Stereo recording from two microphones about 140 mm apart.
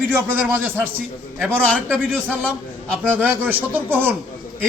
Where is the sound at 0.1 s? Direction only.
15° right (ahead or behind).